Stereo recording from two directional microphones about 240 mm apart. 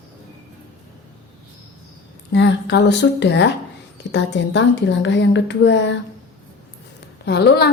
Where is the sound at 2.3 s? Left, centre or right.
Left.